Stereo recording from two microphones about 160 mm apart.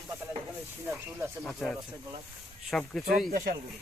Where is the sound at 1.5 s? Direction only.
Centre (ahead or behind).